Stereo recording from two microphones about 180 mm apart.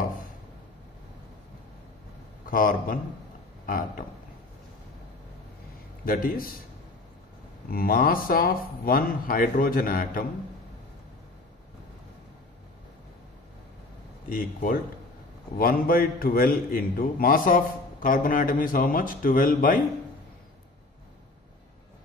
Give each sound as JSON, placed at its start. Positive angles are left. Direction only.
{"t": 2.4, "sound": "a man's voice", "side_deg": 50}
{"t": 6.0, "sound": "speech", "side_deg": 55}
{"t": 7.7, "sound": "speech", "side_deg": 55}
{"t": 14.3, "sound": "speech", "side_deg": 50}